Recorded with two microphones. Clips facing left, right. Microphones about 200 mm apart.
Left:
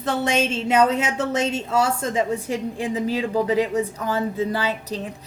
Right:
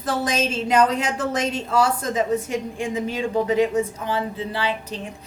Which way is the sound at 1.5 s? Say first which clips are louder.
Right 1 dB; 30° left (ahead or behind).